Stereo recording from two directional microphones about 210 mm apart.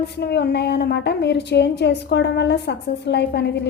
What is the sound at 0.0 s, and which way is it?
A woman's voice, 50° left (ahead or behind).